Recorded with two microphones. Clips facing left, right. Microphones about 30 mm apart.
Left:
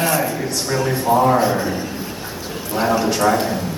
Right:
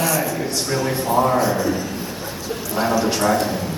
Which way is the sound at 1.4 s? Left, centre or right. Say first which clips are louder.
Left 1 dB; left.